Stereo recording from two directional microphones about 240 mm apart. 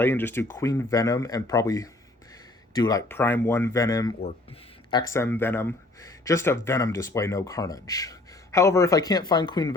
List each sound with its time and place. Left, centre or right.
0.0 s speech: centre